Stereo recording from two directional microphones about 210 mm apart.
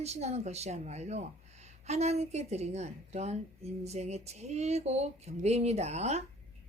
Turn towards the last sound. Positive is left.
turn(degrees=-30)  # may be behind; listen again after turning